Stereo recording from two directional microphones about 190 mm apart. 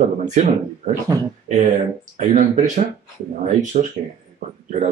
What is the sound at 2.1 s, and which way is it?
Speech, 40° right (ahead or behind).